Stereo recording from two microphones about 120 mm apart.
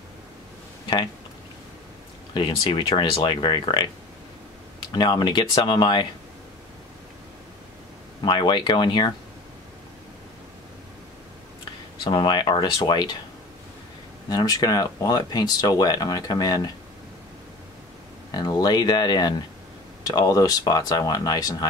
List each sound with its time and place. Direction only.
2.3 s speech: 40° left (ahead or behind)
4.9 s speech: 40° left (ahead or behind)
8.3 s speech: 40° left (ahead or behind)
12.0 s speech: 40° left (ahead or behind)
14.3 s speech: 35° left (ahead or behind)
18.3 s speech: 35° left (ahead or behind)